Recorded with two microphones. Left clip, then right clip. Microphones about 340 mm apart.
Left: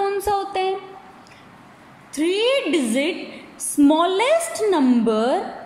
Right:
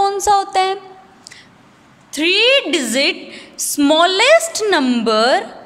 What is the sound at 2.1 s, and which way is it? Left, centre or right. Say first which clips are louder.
A woman's voice: right 7 dB; right.